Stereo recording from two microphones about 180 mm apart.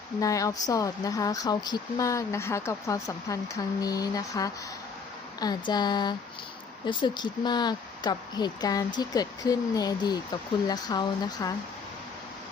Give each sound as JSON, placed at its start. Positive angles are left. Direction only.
{"t": 0.2, "sound": "speech", "side_deg": 20}